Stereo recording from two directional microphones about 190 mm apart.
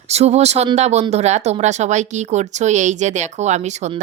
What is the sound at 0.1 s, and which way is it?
Speech, 35° right (ahead or behind).